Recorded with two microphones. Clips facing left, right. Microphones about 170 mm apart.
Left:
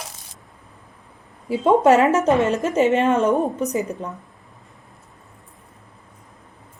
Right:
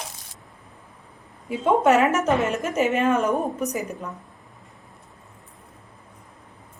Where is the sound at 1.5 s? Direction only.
30° left (ahead or behind).